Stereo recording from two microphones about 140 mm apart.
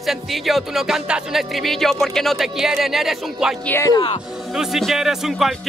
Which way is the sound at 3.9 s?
35° left (ahead or behind).